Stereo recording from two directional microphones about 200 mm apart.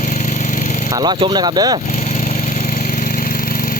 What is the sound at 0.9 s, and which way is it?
Speech, 20° right (ahead or behind).